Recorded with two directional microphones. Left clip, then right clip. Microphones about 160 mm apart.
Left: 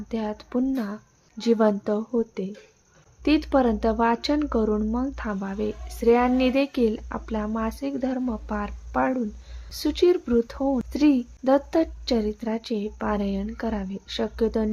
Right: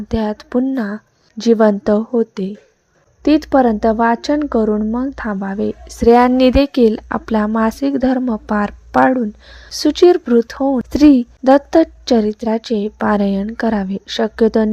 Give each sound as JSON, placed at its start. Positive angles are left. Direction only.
{"t": 0.1, "sound": "speech", "side_deg": -45}